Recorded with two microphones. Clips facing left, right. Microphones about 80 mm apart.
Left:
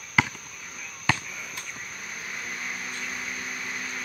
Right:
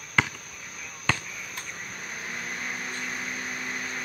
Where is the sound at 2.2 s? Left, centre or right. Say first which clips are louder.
Right 1 dB; right.